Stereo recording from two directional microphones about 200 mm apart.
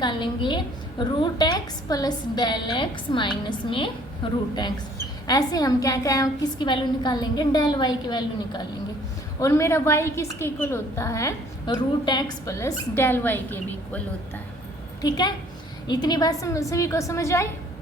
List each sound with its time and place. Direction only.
0.0 s a woman's voice: 25° left (ahead or behind)
15.0 s a woman's voice: 20° left (ahead or behind)